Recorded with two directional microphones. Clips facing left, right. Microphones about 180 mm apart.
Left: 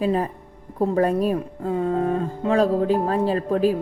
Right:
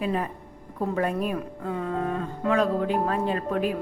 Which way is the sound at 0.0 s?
35° left (ahead or behind).